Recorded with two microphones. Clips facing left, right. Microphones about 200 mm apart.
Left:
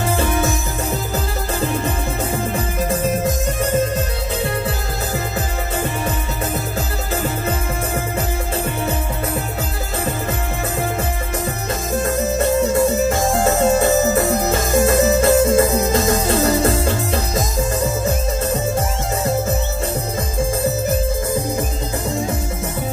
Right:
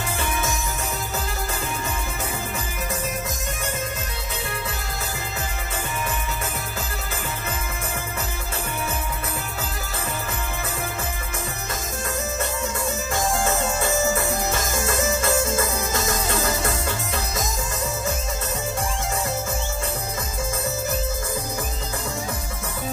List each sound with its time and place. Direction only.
0.0 s music: 35° left (ahead or behind)
12.1 s music: 35° left (ahead or behind)